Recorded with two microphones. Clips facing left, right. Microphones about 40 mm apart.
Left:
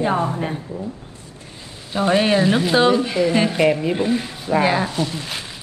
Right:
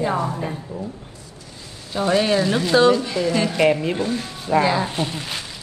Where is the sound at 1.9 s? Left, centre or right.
Left.